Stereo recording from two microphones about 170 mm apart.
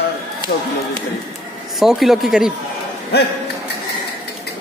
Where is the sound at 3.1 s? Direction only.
75° left (ahead or behind).